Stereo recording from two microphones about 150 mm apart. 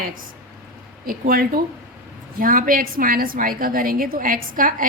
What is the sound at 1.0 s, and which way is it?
A woman's voice, 75° right (ahead or behind).